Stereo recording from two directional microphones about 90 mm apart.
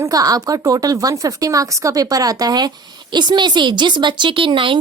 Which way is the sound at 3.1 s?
55° right (ahead or behind).